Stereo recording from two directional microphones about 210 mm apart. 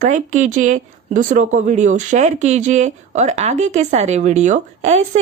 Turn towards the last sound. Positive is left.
turn(degrees=-35)  # may be behind; listen again after turning